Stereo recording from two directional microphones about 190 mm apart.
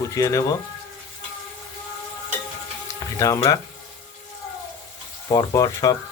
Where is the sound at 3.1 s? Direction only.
15° left (ahead or behind).